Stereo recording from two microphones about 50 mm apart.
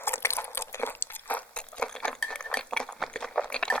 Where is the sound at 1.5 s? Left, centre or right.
Centre.